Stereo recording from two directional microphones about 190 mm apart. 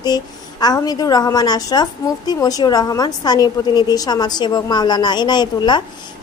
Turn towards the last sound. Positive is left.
turn(degrees=25)  # may be behind; listen again after turning